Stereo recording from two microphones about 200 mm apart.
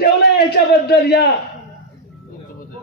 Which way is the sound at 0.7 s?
55° left (ahead or behind).